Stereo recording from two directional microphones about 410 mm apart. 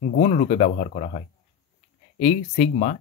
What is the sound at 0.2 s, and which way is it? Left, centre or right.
Speech, centre.